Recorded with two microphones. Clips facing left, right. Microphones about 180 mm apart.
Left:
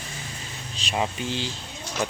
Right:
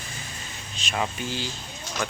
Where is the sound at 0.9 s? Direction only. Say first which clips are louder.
Left 2 dB; 25° left (ahead or behind).